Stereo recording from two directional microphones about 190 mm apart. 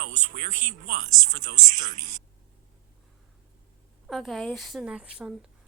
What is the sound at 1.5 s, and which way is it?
Speech, 55° right (ahead or behind).